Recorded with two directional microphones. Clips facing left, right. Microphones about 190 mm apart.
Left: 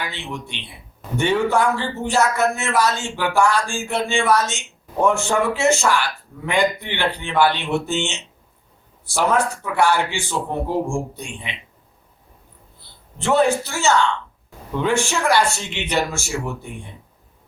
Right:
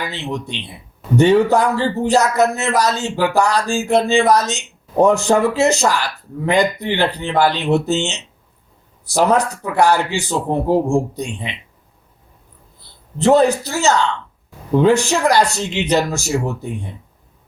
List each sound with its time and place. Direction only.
0.1 s a man's voice: 40° right (ahead or behind)
13.1 s a man's voice: 40° right (ahead or behind)